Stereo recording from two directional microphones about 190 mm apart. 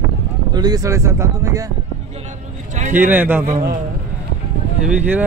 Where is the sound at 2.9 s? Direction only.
10° right (ahead or behind).